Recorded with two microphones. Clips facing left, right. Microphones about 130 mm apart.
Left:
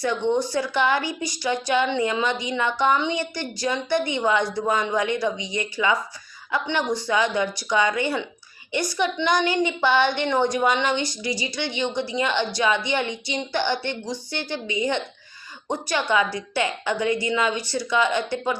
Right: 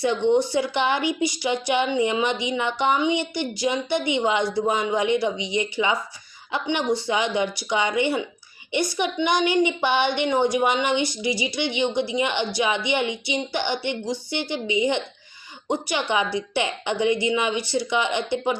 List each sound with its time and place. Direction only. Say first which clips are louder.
0.5 s a woman's voice: even; 20° right (ahead or behind)